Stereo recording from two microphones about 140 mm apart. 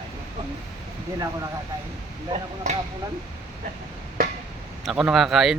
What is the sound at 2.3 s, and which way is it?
Speech, 55° right (ahead or behind).